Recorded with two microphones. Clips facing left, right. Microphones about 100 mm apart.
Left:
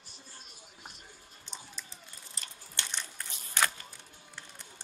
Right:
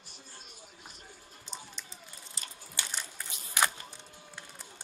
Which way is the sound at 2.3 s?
5° right (ahead or behind).